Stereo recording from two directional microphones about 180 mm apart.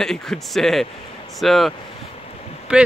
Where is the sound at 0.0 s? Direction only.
Centre (ahead or behind).